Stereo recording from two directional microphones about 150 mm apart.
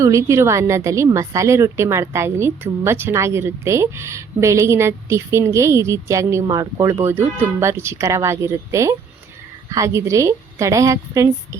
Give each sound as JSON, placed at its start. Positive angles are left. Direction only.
{"t": 0.0, "sound": "a woman's voice", "side_deg": -20}